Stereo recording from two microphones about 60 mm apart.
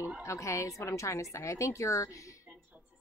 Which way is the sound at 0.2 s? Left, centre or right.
Left.